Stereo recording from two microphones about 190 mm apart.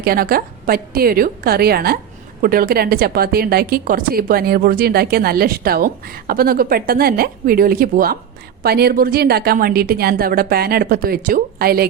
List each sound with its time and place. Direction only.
0.0 s a woman's voice: 50° right (ahead or behind)